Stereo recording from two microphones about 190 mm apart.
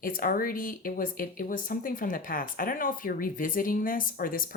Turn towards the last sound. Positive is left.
turn(degrees=50)  # may be behind; listen again after turning